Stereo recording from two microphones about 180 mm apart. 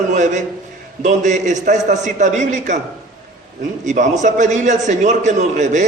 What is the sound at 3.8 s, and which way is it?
A man's voice, 45° right (ahead or behind).